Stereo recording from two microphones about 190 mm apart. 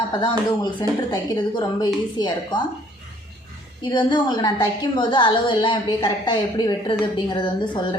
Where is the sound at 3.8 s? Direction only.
25° left (ahead or behind).